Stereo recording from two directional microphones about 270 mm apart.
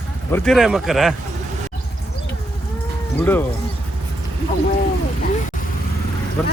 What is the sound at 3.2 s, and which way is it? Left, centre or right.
Speech, centre.